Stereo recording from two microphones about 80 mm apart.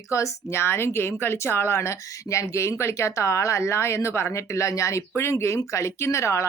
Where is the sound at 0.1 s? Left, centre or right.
Left.